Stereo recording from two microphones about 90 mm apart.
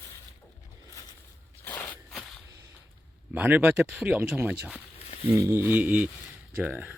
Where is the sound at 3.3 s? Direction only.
20° right (ahead or behind).